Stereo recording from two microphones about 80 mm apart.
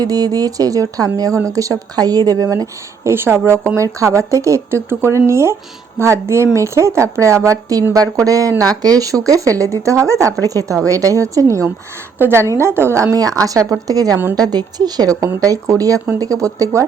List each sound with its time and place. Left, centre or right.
0.0 s speech: right
13.1 s a woman's voice: right